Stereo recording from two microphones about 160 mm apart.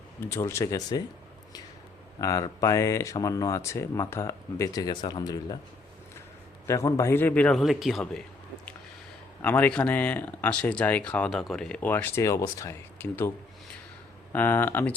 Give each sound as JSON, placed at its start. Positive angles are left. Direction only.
{"t": 0.3, "sound": "speech", "side_deg": 15}
{"t": 2.2, "sound": "speech", "side_deg": 20}
{"t": 6.7, "sound": "speech", "side_deg": 20}
{"t": 9.4, "sound": "speech", "side_deg": 10}
{"t": 14.3, "sound": "speech", "side_deg": 10}